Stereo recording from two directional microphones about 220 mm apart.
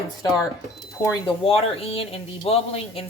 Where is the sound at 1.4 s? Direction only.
25° left (ahead or behind).